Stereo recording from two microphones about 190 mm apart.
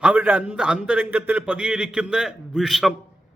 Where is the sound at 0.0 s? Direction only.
10° right (ahead or behind).